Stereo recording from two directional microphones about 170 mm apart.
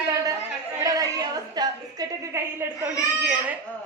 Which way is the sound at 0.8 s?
20° right (ahead or behind).